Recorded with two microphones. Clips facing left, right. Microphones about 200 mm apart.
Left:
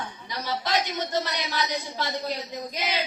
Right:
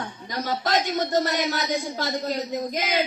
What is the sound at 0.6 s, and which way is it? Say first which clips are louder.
Music: right 4 dB; 45° right (ahead or behind).